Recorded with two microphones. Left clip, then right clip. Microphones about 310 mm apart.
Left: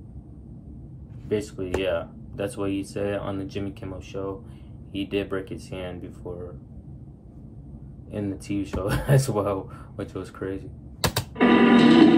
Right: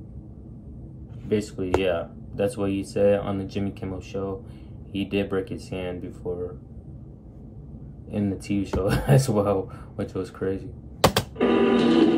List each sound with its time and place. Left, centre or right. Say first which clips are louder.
1.3 s speech: right 2 dB; centre
8.1 s speech: right 2 dB; centre
11.3 s music: left 3 dB; left